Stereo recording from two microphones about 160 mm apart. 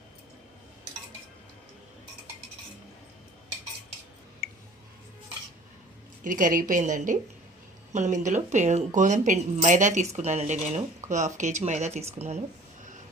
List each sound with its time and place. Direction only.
6.2 s a woman's voice: 55° right (ahead or behind)